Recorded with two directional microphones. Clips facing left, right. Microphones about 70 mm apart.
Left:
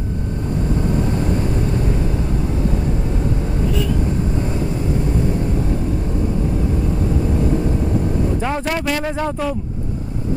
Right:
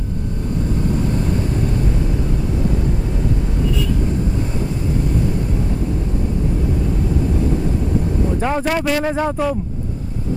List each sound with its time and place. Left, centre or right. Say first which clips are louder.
8.4 s speech: right 2 dB; centre